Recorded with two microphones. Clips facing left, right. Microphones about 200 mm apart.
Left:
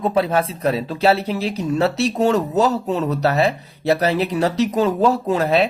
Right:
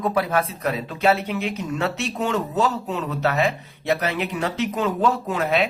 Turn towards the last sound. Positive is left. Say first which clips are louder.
# left 5 dB
turn(degrees=35)  # may be behind; listen again after turning